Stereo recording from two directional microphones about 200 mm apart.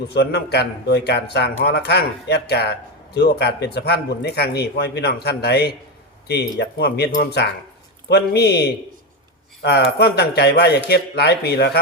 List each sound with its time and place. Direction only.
0.1 s speech: 55° left (ahead or behind)